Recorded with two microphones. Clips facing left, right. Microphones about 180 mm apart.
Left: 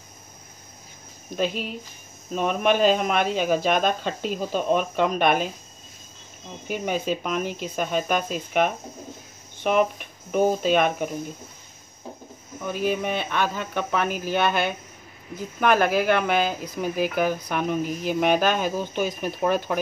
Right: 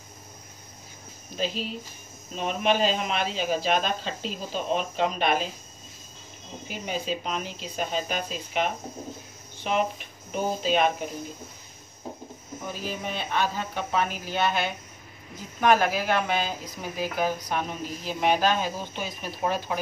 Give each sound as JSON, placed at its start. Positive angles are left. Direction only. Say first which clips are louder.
{"t": 1.3, "sound": "speech", "louder": "left 4 dB", "side_deg": 55}
{"t": 6.7, "sound": "speech", "louder": "left 5 dB", "side_deg": 55}
{"t": 12.7, "sound": "speech", "louder": "left 9 dB", "side_deg": 60}